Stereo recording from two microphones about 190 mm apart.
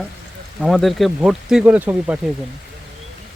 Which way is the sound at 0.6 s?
Centre (ahead or behind).